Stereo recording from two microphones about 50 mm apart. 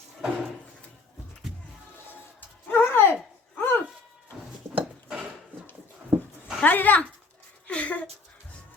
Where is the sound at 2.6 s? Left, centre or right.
Left.